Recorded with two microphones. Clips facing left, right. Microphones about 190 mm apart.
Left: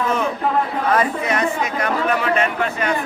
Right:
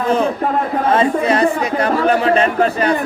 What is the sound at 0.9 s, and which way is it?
Speech, 30° right (ahead or behind).